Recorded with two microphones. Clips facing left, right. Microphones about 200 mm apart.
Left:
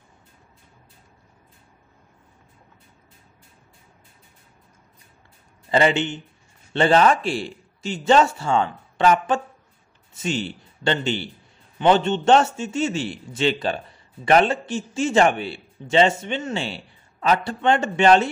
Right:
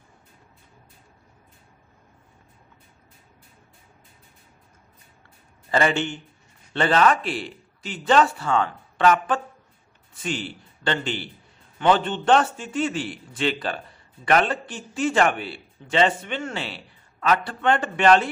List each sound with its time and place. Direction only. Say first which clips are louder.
5.7 s speech: left 3 dB; 20° left (ahead or behind)